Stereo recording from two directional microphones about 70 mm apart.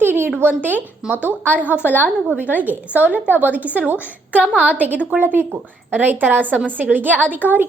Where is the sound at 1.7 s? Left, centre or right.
Left.